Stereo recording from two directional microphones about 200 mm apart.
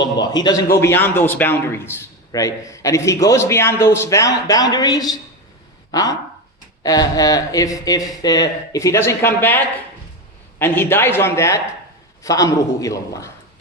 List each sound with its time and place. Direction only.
0.0 s a man's voice: 20° left (ahead or behind)
10.6 s a man's voice: 10° left (ahead or behind)